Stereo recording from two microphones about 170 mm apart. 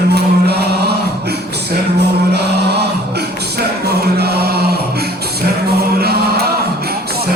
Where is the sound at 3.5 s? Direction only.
70° right (ahead or behind).